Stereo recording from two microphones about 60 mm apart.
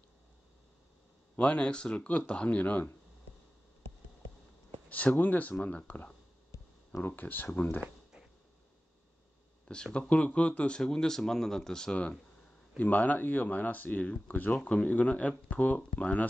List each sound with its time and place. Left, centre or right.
1.4 s speech: centre
4.8 s speech: left
7.0 s speech: left
9.9 s speech: left
10.8 s speech: centre; by 16.3 s left